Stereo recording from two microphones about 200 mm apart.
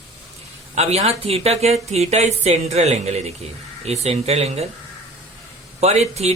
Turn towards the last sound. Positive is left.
turn(degrees=-35)  # may be behind; listen again after turning